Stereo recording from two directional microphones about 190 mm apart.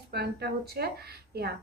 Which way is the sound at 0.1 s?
60° right (ahead or behind).